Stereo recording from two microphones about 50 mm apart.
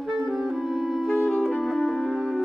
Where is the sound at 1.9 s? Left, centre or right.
Centre.